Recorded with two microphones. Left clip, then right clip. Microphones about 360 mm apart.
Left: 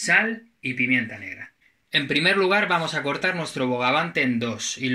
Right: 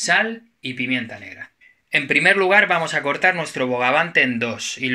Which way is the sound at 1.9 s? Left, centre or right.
Centre.